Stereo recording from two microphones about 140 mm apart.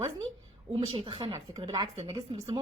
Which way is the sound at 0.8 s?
40° right (ahead or behind).